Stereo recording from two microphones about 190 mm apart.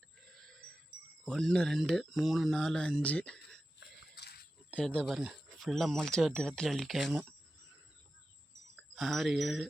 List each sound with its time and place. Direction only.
0.3 s a sound: centre (ahead or behind)
1.2 s speech: centre (ahead or behind)
3.8 s wheeze: 60° left (ahead or behind)
4.7 s speech: 5° left (ahead or behind)
8.7 s speech: centre (ahead or behind)